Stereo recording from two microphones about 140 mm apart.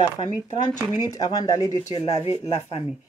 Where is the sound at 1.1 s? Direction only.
25° left (ahead or behind).